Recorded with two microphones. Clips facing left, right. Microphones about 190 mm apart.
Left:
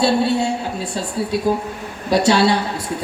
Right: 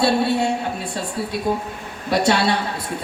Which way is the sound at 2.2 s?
60° right (ahead or behind).